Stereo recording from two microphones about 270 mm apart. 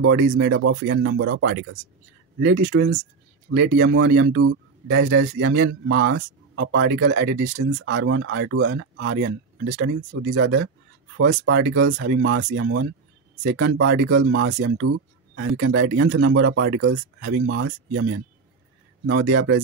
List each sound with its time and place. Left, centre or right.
0.0 s speech: right
19.0 s speech: right